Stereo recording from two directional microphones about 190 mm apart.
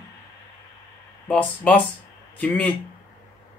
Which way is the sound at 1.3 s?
10° left (ahead or behind).